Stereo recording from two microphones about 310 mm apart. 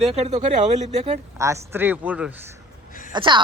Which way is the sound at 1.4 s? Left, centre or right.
Centre.